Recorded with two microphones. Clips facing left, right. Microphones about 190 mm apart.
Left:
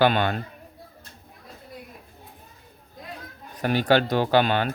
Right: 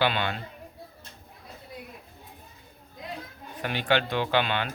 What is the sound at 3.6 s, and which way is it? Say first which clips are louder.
Speech: left 6 dB; 40° left (ahead or behind).